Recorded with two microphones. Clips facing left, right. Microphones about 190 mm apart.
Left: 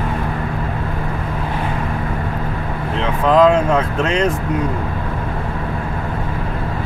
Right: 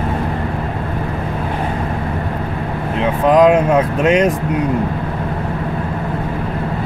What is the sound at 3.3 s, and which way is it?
Speech, 15° right (ahead or behind).